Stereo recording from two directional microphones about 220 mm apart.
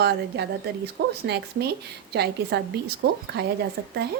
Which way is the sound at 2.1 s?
45° right (ahead or behind).